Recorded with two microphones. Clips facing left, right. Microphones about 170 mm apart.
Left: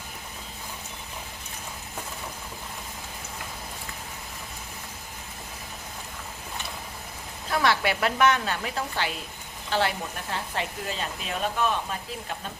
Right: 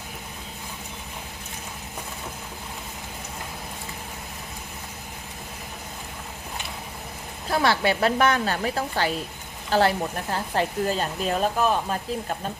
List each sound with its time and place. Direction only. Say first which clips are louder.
7.5 s speech: right 3 dB; 30° right (ahead or behind)